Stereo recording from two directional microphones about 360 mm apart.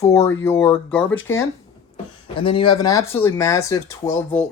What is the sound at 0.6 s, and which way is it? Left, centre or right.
Speech, centre.